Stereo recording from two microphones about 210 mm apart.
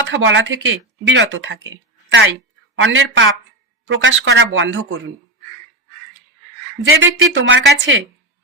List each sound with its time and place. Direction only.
0.0 s speech: 60° right (ahead or behind)
6.9 s speech: 70° right (ahead or behind)